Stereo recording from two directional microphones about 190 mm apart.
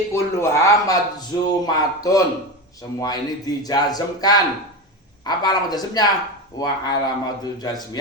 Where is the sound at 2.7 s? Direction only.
20° left (ahead or behind).